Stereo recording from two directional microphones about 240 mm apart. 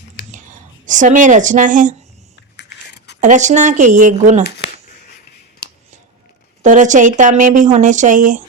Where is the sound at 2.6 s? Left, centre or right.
Left.